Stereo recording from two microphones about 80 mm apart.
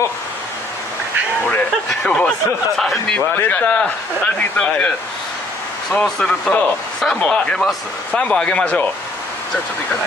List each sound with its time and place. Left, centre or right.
1.9 s speech: centre
3.3 s speech: centre